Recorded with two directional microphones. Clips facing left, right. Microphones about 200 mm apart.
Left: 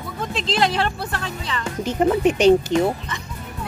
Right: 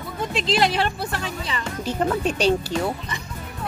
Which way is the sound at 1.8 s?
20° left (ahead or behind).